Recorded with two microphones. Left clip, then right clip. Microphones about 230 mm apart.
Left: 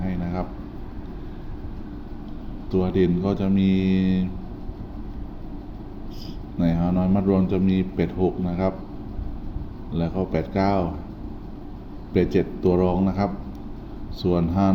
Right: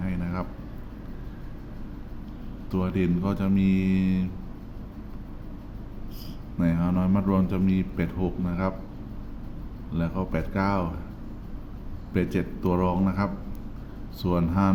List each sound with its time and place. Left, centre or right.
0.0 s a sound: centre
2.7 s a man's voice: centre
6.6 s a man's voice: centre
9.9 s a man's voice: centre
12.1 s a man's voice: centre